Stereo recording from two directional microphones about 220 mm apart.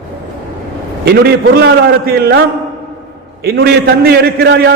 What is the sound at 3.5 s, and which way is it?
A man's voice, 50° right (ahead or behind).